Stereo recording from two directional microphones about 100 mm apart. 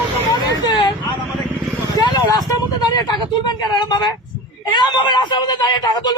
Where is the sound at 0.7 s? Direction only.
50° left (ahead or behind).